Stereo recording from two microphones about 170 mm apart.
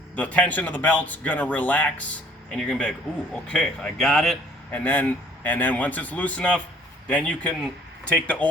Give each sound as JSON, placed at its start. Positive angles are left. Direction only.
{"t": 0.2, "sound": "speech", "side_deg": 10}